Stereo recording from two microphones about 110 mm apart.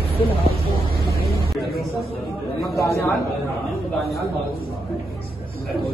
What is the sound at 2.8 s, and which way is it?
Speech, 25° left (ahead or behind).